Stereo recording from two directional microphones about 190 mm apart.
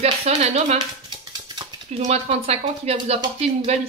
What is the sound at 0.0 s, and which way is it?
Speech, 35° right (ahead or behind).